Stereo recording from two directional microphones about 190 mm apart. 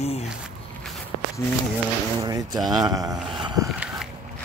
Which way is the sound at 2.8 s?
20° right (ahead or behind).